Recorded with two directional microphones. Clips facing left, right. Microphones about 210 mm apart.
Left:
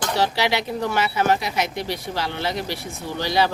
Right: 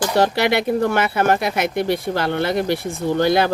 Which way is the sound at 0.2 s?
55° right (ahead or behind).